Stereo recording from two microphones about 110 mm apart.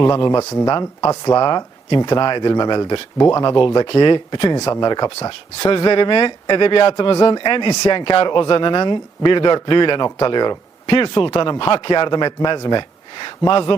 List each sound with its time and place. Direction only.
0.3 s speech: 30° left (ahead or behind)
3.2 s speech: 25° left (ahead or behind)
3.4 s speech: 45° left (ahead or behind)
4.5 s speech: 30° left (ahead or behind); by 13.7 s 50° left (ahead or behind)